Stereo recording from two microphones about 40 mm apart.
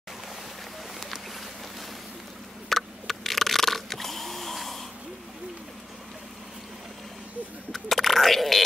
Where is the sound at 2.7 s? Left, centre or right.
Centre.